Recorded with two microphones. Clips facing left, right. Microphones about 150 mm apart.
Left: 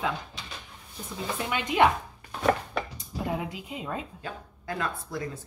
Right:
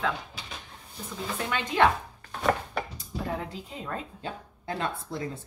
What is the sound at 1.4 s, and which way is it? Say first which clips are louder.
Speech: left 1 dB; 15° left (ahead or behind).